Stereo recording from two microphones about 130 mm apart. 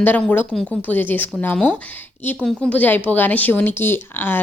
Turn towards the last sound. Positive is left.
turn(degrees=15)  # may be behind; listen again after turning